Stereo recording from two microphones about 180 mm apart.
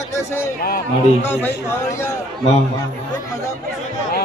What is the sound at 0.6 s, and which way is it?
Speech, 55° left (ahead or behind).